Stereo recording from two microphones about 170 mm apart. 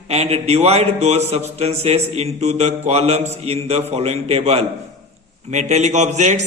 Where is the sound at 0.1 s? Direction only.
35° right (ahead or behind).